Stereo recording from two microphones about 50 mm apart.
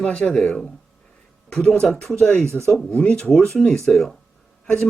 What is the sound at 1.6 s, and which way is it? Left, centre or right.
Speech, centre.